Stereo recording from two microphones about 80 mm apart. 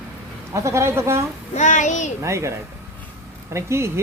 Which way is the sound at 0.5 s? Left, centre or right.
Right.